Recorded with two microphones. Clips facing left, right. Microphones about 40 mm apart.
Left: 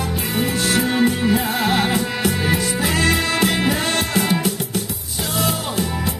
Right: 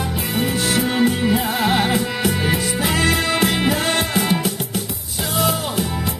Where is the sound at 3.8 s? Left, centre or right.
Centre.